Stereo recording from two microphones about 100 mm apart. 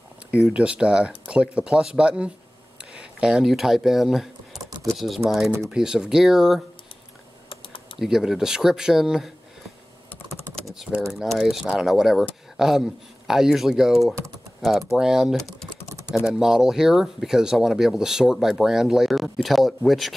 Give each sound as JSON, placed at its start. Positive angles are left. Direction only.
{"t": 0.3, "sound": "speech", "side_deg": -15}
{"t": 7.4, "sound": "typing", "side_deg": 60}
{"t": 8.0, "sound": "speech", "side_deg": -5}
{"t": 10.7, "sound": "typing", "side_deg": -5}
{"t": 11.2, "sound": "speech", "side_deg": 0}